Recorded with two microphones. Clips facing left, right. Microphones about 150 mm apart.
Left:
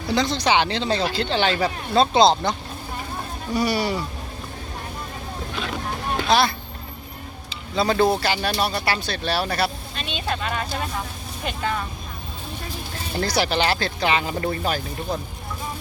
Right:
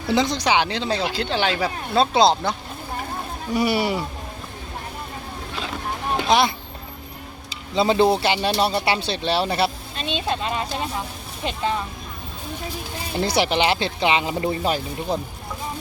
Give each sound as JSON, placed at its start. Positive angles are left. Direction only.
{"t": 0.1, "sound": "speech", "side_deg": -15}
{"t": 3.5, "sound": "speech", "side_deg": -20}
{"t": 6.1, "sound": "speech", "side_deg": -20}
{"t": 7.8, "sound": "speech", "side_deg": -25}
{"t": 13.1, "sound": "speech", "side_deg": -25}